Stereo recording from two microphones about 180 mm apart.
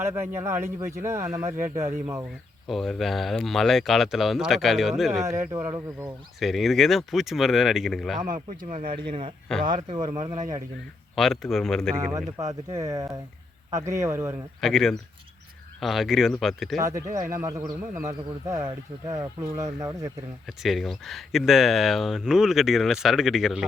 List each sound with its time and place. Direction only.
0.0 s speech: 15° right (ahead or behind)
2.6 s speech: centre (ahead or behind)
5.2 s speech: 15° right (ahead or behind)
6.4 s speech: centre (ahead or behind)
8.2 s speech: 45° right (ahead or behind)
8.9 s speech: 30° right (ahead or behind)
10.2 s speech: 20° right (ahead or behind)
11.1 s speech: centre (ahead or behind)
11.9 s speech: 20° right (ahead or behind)
14.6 s speech: centre (ahead or behind)
17.2 s speech: 15° right (ahead or behind)
20.6 s speech: centre (ahead or behind)